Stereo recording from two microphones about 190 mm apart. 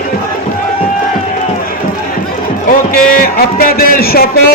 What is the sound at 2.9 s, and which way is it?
A man's voice, 50° left (ahead or behind).